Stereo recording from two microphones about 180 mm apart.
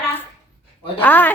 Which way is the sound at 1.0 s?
10° left (ahead or behind).